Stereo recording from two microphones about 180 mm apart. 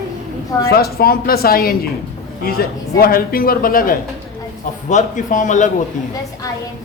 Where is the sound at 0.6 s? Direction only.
60° left (ahead or behind).